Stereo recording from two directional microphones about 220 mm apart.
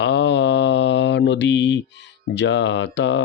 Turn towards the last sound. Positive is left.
turn(degrees=50)  # may be behind; listen again after turning